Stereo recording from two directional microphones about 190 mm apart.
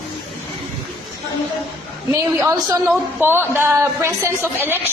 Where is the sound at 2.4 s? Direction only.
15° right (ahead or behind).